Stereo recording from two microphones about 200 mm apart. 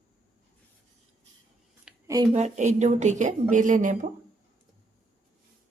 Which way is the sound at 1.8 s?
15° right (ahead or behind).